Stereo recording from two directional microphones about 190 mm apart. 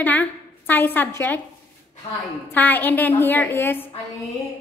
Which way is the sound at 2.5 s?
10° left (ahead or behind).